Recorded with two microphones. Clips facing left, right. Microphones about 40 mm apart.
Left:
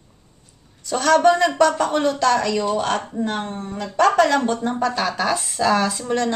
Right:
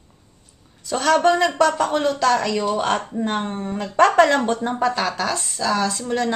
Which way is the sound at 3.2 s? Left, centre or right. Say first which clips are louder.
Right 1 dB; right.